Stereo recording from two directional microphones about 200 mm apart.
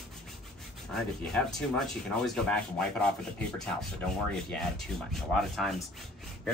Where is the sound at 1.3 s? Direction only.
5° left (ahead or behind).